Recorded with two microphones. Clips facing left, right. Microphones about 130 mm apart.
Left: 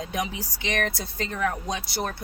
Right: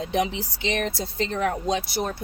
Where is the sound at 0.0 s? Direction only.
25° right (ahead or behind).